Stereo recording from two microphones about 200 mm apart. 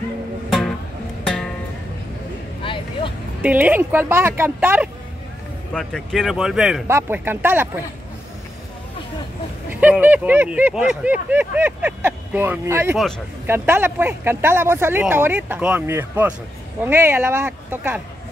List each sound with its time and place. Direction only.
0.5 s music: centre (ahead or behind)
2.6 s vehicle: 25° left (ahead or behind)
3.4 s speech: 10° right (ahead or behind)
5.7 s speech: 5° left (ahead or behind)
9.7 s speech: 10° right (ahead or behind)